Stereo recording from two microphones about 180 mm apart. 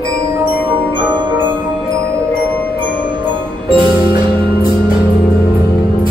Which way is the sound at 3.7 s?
25° right (ahead or behind).